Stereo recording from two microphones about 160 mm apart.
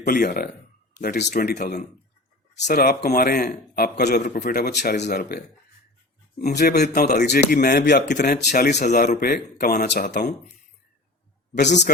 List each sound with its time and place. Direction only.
0.0 s a man's voice: 65° left (ahead or behind)
1.0 s a man's voice: 80° left
6.5 s speech: 90° left
7.5 s speech: 75° left (ahead or behind)
8.8 s speech: 50° left (ahead or behind)
9.2 s a man's voice: 70° left (ahead or behind); by 10.2 s 90° left